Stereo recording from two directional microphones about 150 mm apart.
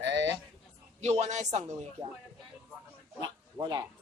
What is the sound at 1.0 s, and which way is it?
Speech, 50° right (ahead or behind).